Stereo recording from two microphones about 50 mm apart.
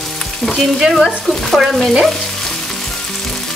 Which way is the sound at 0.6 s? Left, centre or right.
Centre.